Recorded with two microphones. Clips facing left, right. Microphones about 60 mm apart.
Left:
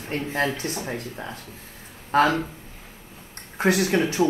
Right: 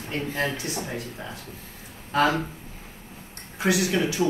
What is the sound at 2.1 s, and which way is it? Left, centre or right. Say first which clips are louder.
Speech: left 3 dB; left.